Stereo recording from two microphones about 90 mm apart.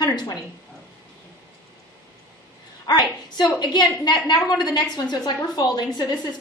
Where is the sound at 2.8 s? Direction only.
50° left (ahead or behind).